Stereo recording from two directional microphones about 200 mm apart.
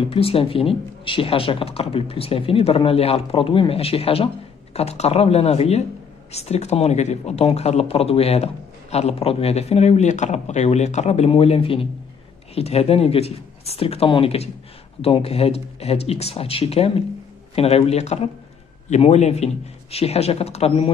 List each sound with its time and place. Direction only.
0.1 s speech: 30° left (ahead or behind)